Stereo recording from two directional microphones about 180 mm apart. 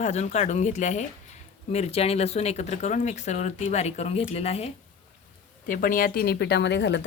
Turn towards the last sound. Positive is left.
turn(degrees=75)  # may be behind; listen again after turning